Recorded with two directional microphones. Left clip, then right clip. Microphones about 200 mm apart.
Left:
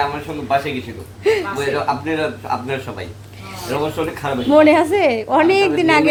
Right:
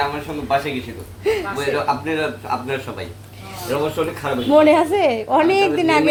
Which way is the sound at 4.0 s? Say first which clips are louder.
Even; 5° left (ahead or behind).